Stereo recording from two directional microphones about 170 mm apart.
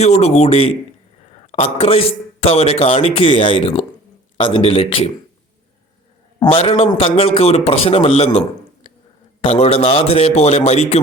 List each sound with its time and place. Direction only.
0.0 s a man's voice: 40° left (ahead or behind)
6.4 s a man's voice: 30° left (ahead or behind)
9.5 s a man's voice: 35° left (ahead or behind)